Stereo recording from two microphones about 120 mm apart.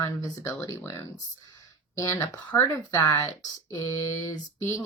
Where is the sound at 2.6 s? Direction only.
25° left (ahead or behind).